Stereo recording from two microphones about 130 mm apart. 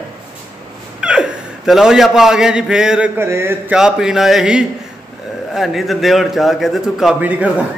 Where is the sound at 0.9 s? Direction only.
5° right (ahead or behind).